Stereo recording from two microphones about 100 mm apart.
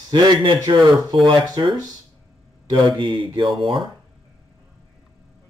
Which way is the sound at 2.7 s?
50° right (ahead or behind).